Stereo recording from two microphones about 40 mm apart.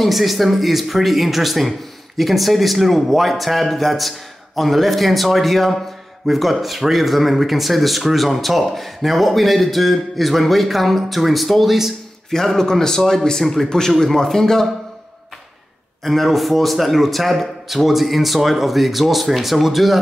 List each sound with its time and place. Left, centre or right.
0.0 s speech: centre
12.5 s a man's voice: centre
16.0 s speech: centre